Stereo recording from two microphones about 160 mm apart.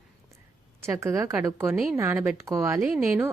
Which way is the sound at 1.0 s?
20° right (ahead or behind).